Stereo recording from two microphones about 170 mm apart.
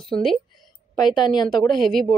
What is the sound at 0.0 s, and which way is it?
Speech, centre (ahead or behind).